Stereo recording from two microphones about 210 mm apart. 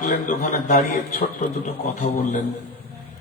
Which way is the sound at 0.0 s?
35° left (ahead or behind).